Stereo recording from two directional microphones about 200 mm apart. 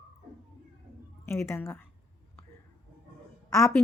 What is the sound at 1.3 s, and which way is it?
Speech, 15° left (ahead or behind).